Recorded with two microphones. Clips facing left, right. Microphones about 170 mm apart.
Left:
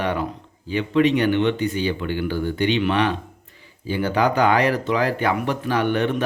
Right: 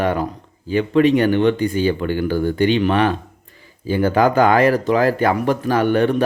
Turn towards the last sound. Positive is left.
turn(degrees=-40)  # may be behind; listen again after turning